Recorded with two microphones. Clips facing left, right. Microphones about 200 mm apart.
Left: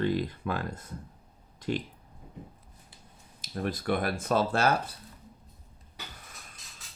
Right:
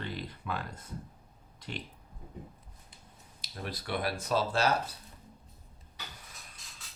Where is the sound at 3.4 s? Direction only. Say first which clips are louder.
Left 8 dB; 50° left (ahead or behind).